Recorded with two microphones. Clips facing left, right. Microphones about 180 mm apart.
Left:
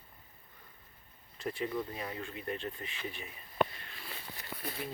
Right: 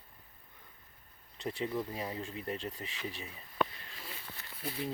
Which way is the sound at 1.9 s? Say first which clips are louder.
Right 2 dB; 25° right (ahead or behind).